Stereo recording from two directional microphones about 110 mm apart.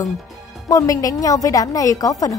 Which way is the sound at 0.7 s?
30° left (ahead or behind).